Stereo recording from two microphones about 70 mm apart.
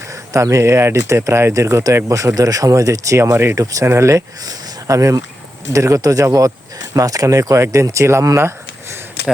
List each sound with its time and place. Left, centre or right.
0.1 s speech: right
3.8 s speech: right
4.4 s speech: right